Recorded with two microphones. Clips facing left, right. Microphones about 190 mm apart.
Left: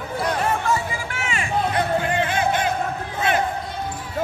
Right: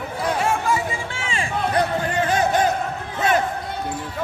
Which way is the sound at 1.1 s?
30° right (ahead or behind).